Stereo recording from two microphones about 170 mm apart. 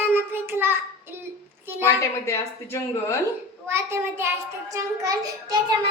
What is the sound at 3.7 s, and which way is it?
Child singing, 15° right (ahead or behind).